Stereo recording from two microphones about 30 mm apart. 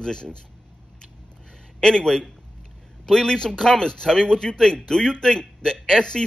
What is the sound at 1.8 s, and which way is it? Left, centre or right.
A man's voice, left.